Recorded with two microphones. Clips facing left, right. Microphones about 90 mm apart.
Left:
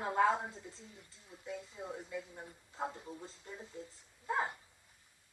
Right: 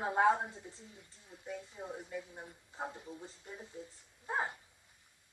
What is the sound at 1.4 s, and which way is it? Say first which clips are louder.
Speech: even; 30° right (ahead or behind).